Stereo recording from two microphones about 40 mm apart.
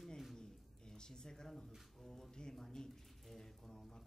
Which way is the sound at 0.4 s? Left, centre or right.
Centre.